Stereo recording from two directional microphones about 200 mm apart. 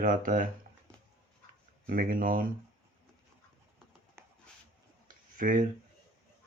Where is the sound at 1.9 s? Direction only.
45° right (ahead or behind).